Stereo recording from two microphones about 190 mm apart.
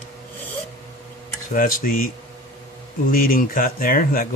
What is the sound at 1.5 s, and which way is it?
Speech, 45° left (ahead or behind).